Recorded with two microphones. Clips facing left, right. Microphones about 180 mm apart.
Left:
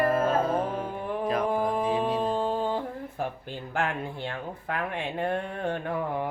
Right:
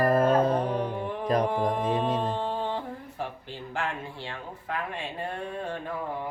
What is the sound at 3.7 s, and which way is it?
Speech, 55° left (ahead or behind).